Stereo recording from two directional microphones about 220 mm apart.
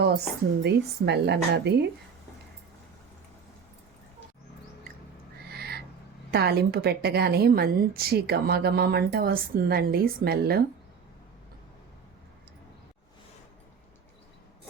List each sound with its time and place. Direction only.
0.6 s a woman's voice: 50° right (ahead or behind)
5.5 s owl: 45° right (ahead or behind)
6.3 s a woman's voice: 45° right (ahead or behind)